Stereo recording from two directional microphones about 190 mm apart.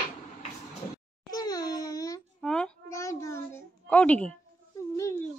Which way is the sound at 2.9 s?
15° left (ahead or behind).